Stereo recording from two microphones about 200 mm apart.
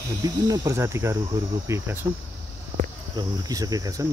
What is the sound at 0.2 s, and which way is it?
Cricket, 15° right (ahead or behind).